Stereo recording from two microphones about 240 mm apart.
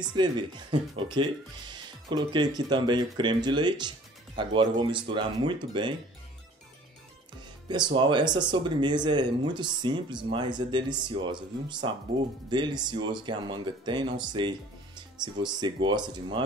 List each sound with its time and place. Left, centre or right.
0.1 s speech: centre
7.6 s speech: centre